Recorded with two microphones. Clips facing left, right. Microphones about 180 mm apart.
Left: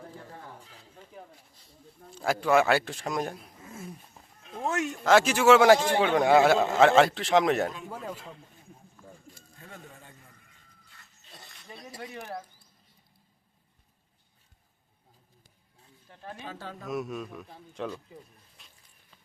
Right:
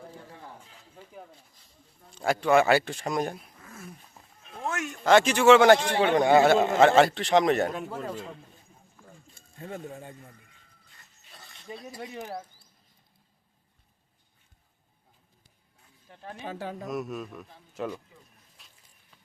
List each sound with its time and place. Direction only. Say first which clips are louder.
2.1 s a man's voice: right 2 dB; centre (ahead or behind)
3.6 s dog: left 3 dB; 25° left (ahead or behind)
4.7 s a sound: left 5 dB; 30° left (ahead or behind)
4.9 s a man's voice: right 2 dB; 5° left (ahead or behind)
9.6 s speech: right 11 dB; 45° right (ahead or behind)
11.9 s speech: even; 10° right (ahead or behind)
16.0 s speech: right 3 dB; 15° right (ahead or behind)
16.8 s a man's voice: left 3 dB; centre (ahead or behind)
18.6 s a sound: right 1 dB; centre (ahead or behind)